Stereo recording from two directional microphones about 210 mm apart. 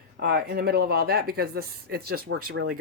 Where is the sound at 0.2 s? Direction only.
50° right (ahead or behind).